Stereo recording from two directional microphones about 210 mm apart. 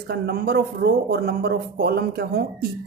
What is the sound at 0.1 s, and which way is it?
Speech, 50° right (ahead or behind).